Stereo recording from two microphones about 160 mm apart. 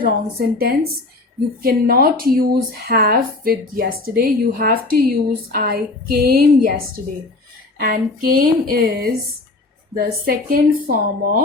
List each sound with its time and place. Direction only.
0.0 s speech: 70° right (ahead or behind)